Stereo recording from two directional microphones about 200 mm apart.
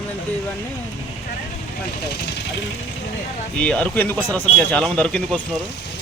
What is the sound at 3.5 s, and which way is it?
Speech, 5° left (ahead or behind).